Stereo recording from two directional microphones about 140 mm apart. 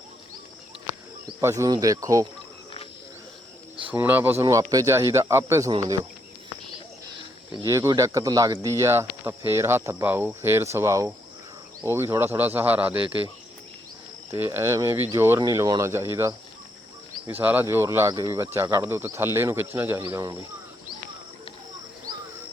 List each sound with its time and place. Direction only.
1.4 s speech: 20° right (ahead or behind)
3.9 s speech: 15° right (ahead or behind)
4.4 s speech: 25° right (ahead or behind)
7.6 s speech: 25° right (ahead or behind)
14.3 s speech: 15° right (ahead or behind)